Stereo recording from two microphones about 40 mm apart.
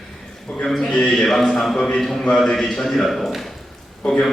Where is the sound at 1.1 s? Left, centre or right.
Centre.